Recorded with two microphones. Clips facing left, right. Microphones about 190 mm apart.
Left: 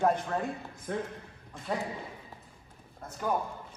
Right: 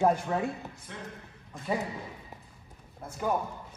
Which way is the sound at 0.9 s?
45° left (ahead or behind).